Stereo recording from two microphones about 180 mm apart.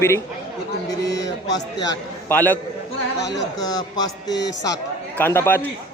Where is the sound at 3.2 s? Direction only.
75° left (ahead or behind).